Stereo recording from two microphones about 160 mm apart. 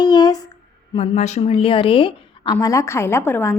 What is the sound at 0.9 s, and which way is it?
A woman's voice, 40° left (ahead or behind).